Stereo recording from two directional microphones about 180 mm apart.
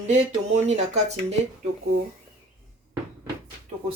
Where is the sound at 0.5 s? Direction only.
40° right (ahead or behind).